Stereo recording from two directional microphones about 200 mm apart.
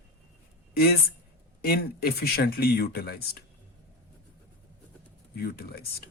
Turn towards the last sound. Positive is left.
turn(degrees=50)  # may be behind; listen again after turning